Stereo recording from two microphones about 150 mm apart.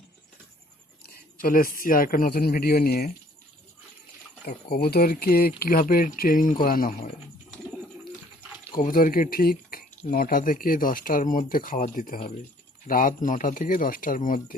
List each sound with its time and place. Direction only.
1.4 s speech: 70° left (ahead or behind); by 3.1 s 90° left
4.4 s speech: 90° left; by 7.1 s 70° left (ahead or behind)
8.7 s speech: 65° left (ahead or behind)